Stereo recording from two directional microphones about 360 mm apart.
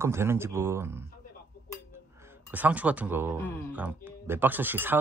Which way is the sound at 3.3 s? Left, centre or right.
Centre.